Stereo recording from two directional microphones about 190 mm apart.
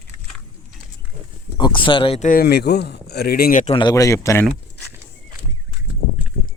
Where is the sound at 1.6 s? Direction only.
25° left (ahead or behind).